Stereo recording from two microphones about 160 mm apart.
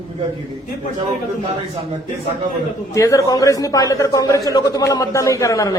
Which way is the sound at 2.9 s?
20° left (ahead or behind).